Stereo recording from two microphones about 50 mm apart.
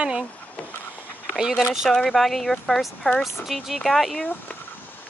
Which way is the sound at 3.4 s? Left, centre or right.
Centre.